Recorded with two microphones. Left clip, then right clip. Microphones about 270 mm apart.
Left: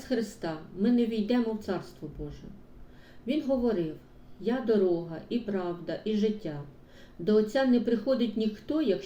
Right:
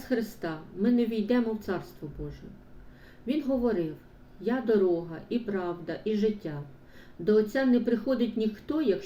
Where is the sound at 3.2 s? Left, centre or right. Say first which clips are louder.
Even; centre.